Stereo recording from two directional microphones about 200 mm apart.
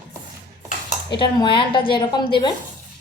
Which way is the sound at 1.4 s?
25° left (ahead or behind).